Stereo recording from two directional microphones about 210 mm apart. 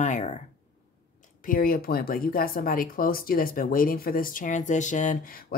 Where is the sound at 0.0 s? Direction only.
35° left (ahead or behind).